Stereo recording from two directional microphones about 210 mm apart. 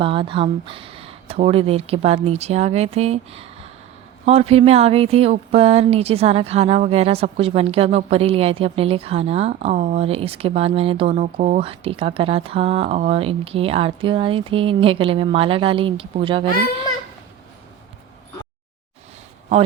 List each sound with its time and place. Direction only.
0.0 s speech: 25° right (ahead or behind)